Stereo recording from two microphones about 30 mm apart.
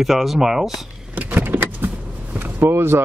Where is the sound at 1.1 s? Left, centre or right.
Right.